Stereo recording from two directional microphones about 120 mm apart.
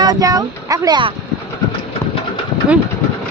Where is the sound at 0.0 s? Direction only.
30° right (ahead or behind).